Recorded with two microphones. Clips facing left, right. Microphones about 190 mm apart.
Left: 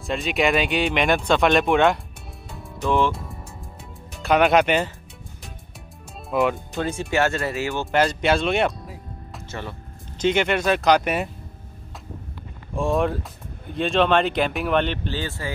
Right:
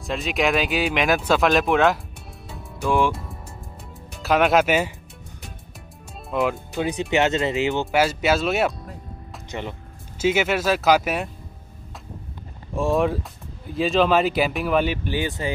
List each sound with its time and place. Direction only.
0.0 s speech: centre (ahead or behind)
2.5 s music: centre (ahead or behind)
4.1 s speech: centre (ahead or behind)
6.3 s speech: centre (ahead or behind)
6.8 s speech: 15° right (ahead or behind)
7.9 s speech: 5° right (ahead or behind)
9.5 s speech: 20° right (ahead or behind)
10.1 s speech: 5° right (ahead or behind)
12.7 s speech: centre (ahead or behind); by 15.5 s 15° right (ahead or behind)